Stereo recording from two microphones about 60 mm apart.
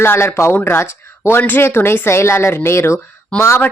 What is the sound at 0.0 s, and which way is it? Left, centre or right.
Speech, left.